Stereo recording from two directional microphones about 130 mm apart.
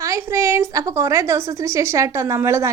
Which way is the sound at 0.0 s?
20° right (ahead or behind).